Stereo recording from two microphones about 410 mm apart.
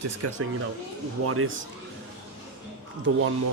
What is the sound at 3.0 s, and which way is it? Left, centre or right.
Speech, right.